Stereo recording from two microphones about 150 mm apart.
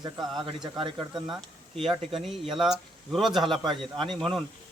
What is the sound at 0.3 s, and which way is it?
Speech, 30° right (ahead or behind).